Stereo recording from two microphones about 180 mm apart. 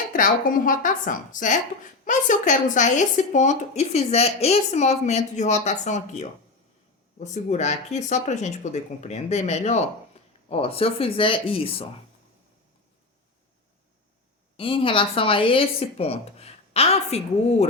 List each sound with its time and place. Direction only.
0.1 s a woman's voice: 50° left (ahead or behind); by 11.9 s 30° left (ahead or behind)
14.5 s speech: 30° left (ahead or behind)